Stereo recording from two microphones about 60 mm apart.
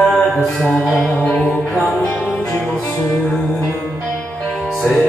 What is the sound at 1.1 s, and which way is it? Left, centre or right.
Music, centre.